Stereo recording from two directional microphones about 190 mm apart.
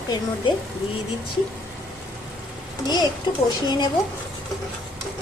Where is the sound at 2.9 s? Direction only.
20° left (ahead or behind).